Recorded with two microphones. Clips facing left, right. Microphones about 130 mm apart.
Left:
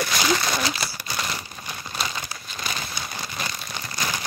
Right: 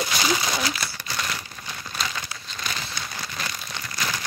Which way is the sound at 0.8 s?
15° left (ahead or behind).